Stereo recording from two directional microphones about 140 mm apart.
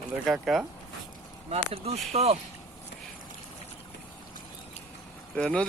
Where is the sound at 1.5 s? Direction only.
45° right (ahead or behind).